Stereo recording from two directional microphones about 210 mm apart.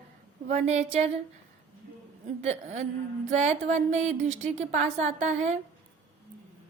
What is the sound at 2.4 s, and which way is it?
A woman's voice, 35° right (ahead or behind).